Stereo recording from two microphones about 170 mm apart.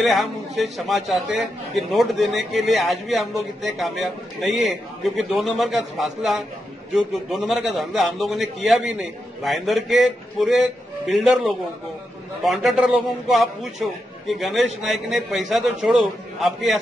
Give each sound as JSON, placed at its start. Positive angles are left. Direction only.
{"t": 0.0, "sound": "a man's voice", "side_deg": 0}